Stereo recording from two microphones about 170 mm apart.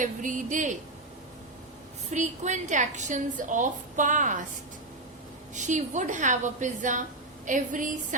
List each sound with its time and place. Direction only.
0.0 s a woman's voice: 50° right (ahead or behind)
2.0 s a woman's voice: 45° right (ahead or behind)
5.5 s a woman's voice: 45° right (ahead or behind)